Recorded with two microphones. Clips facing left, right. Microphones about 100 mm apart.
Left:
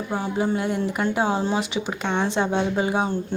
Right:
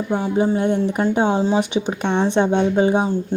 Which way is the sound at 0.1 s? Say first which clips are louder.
Right 5 dB; 25° right (ahead or behind).